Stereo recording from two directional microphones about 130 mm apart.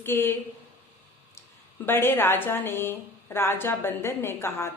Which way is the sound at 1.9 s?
15° left (ahead or behind).